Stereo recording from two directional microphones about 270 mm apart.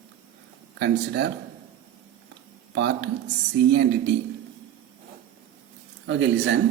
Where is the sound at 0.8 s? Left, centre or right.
Right.